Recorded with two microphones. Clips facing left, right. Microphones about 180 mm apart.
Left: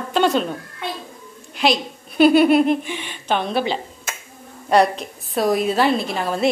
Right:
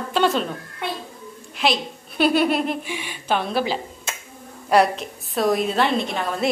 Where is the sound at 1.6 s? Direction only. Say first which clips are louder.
Left 3 dB; centre (ahead or behind).